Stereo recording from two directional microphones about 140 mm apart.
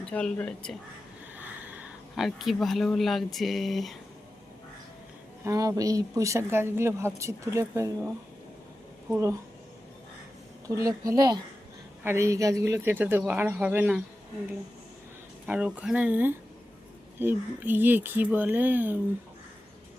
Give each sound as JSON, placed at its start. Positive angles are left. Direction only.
{"t": 0.1, "sound": "speech", "side_deg": 10}
{"t": 1.4, "sound": "speech", "side_deg": -10}
{"t": 5.5, "sound": "a woman's voice", "side_deg": -25}
{"t": 10.7, "sound": "a woman's voice", "side_deg": -25}
{"t": 15.4, "sound": "speech", "side_deg": -10}